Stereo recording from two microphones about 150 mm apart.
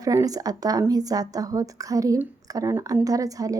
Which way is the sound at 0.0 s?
25° right (ahead or behind).